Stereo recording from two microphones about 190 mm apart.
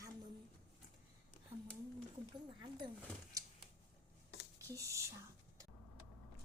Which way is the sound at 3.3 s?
15° right (ahead or behind).